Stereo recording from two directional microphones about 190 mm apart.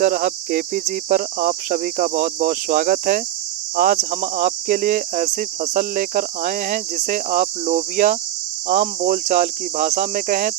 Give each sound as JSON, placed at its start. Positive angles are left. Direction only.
{"t": 0.0, "sound": "speech", "side_deg": -50}